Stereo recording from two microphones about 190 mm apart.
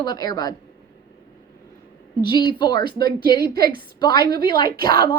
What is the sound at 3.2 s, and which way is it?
A woman's voice, 55° right (ahead or behind).